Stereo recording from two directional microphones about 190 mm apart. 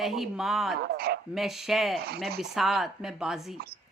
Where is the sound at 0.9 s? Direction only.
55° right (ahead or behind).